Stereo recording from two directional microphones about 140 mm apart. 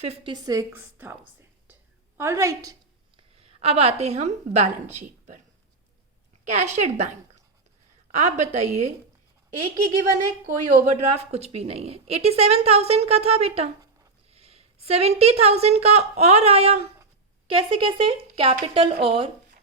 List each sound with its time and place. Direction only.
0.0 s a woman's voice: 45° right (ahead or behind)
0.3 s a woman's voice: 25° right (ahead or behind)
0.9 s whispering: 15° right (ahead or behind)
2.1 s a woman's voice: 20° right (ahead or behind)
3.2 s a woman's voice: 45° right (ahead or behind)
6.4 s a woman's voice: 55° right (ahead or behind)
8.4 s a woman's voice: 55° right (ahead or behind)
10.1 s a woman's voice: 60° right (ahead or behind); by 19.3 s 40° right (ahead or behind)